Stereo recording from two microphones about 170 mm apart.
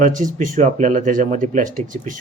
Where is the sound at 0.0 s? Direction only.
50° right (ahead or behind).